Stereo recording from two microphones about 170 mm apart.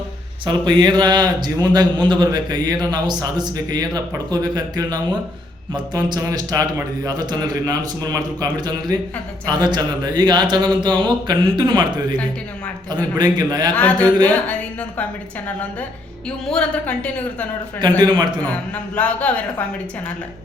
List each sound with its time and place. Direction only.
0.4 s speech: 25° right (ahead or behind)
13.7 s a man's voice: 10° left (ahead or behind)
16.5 s a man's voice: 5° left (ahead or behind)
18.4 s a man's voice: 10° left (ahead or behind)